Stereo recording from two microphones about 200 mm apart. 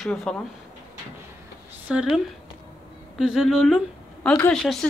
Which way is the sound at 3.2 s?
Centre (ahead or behind).